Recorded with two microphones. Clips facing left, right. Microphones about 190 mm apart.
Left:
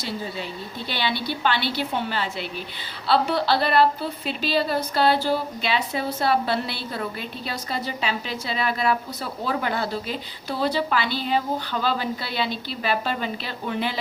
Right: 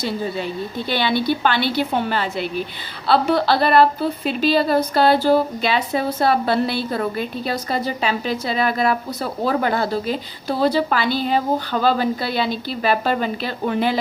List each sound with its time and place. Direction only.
0.9 s a woman's voice: 50° right (ahead or behind)